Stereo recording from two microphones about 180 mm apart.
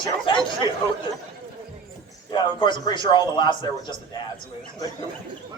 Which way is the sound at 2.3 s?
25° left (ahead or behind).